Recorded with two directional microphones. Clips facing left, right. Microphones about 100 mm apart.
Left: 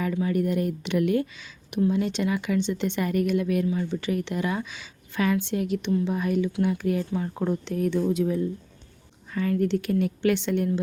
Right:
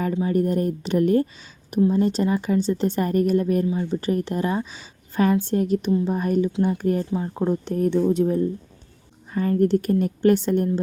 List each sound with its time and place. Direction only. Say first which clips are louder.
0.0 s a woman's voice: right 3 dB; 30° right (ahead or behind)
3.7 s speech: right 3 dB; 25° right (ahead or behind)
4.0 s a woman's voice: right 4 dB; 40° right (ahead or behind)
7.1 s speech: right 3 dB; 25° right (ahead or behind)
7.6 s a woman's voice: right 5 dB; 45° right (ahead or behind)